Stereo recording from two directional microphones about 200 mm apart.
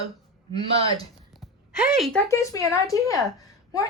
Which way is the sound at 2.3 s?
15° left (ahead or behind).